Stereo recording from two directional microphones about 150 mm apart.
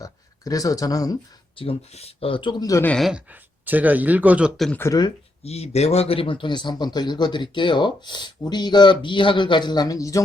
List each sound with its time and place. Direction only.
0.0 s a sound: 25° left (ahead or behind)
1.5 s a man's voice: 40° left (ahead or behind); by 2.8 s 25° left (ahead or behind)
2.8 s speech: 5° left (ahead or behind)
4.8 s speech: 25° left (ahead or behind)
5.4 s a man's voice: 45° left (ahead or behind); by 10.2 s 25° left (ahead or behind)